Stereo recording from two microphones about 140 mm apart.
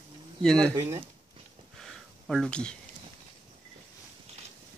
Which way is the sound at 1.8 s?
Centre (ahead or behind).